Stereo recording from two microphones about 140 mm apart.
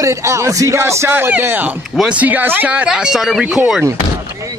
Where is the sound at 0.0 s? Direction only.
20° right (ahead or behind); by 3.8 s 5° right (ahead or behind).